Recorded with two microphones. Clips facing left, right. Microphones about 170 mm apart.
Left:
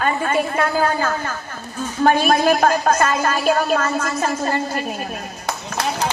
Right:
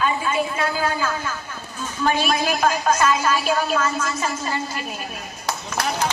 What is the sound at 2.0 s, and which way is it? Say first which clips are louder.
A woman's voice: left 6 dB; 50° left (ahead or behind).